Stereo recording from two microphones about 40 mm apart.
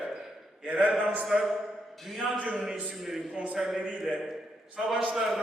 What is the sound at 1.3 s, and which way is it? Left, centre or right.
Speech, centre.